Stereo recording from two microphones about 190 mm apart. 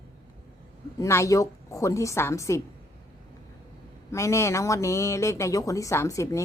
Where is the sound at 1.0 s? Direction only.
15° left (ahead or behind).